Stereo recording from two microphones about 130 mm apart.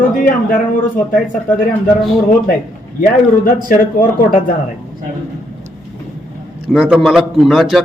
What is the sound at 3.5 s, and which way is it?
Speech, 90° left.